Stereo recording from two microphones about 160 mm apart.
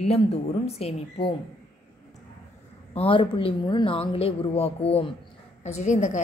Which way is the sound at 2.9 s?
35° left (ahead or behind).